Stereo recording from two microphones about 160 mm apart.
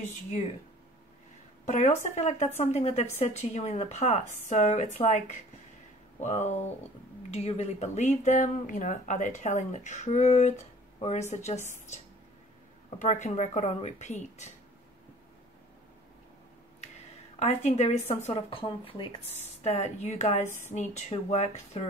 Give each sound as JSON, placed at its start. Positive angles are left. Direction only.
{"t": 2.0, "sound": "speech", "side_deg": 45}
{"t": 13.0, "sound": "speech", "side_deg": 45}
{"t": 17.4, "sound": "speech", "side_deg": 45}